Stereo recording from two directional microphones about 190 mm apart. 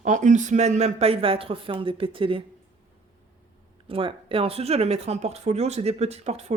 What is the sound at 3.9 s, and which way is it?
Speech, 30° right (ahead or behind).